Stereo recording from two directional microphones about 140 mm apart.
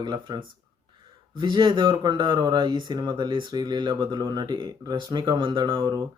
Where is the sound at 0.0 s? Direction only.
35° right (ahead or behind).